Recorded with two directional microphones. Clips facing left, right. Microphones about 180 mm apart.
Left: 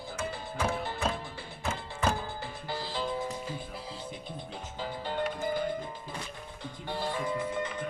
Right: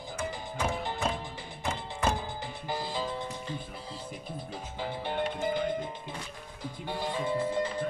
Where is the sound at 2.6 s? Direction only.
15° right (ahead or behind).